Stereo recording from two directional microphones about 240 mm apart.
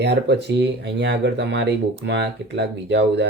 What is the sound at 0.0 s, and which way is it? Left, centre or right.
Speech, right.